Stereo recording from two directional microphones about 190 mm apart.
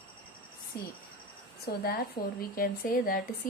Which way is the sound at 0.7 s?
60° left (ahead or behind).